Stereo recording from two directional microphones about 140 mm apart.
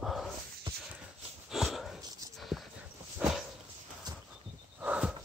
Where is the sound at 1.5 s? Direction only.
Centre (ahead or behind).